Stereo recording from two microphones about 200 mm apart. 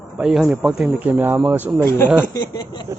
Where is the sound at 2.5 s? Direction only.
20° left (ahead or behind).